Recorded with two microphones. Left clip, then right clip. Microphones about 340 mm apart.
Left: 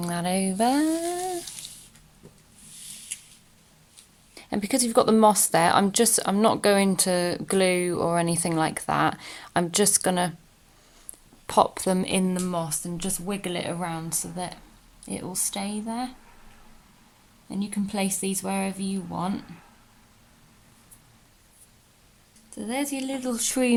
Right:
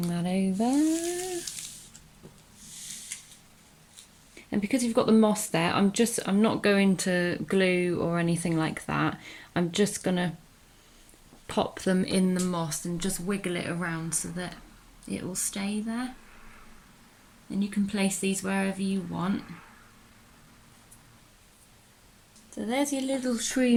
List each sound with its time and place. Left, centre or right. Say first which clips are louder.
0.1 s music: left 7 dB; centre
4.5 s speech: left 4 dB; centre
11.6 s speech: left 3 dB; centre
17.6 s speech: left 1 dB; centre
22.5 s speech: right 1 dB; centre